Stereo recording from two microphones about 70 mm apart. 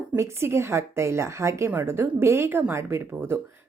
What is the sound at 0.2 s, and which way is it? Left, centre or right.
A woman's voice, right.